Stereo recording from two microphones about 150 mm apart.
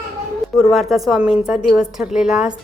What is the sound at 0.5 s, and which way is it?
A woman's voice, centre (ahead or behind).